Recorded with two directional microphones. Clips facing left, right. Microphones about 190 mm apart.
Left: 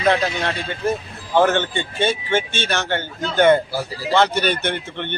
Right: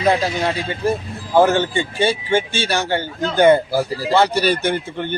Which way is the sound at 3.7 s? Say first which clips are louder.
Right 6 dB; 45° right (ahead or behind).